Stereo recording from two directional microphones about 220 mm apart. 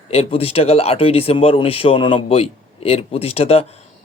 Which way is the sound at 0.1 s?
25° left (ahead or behind).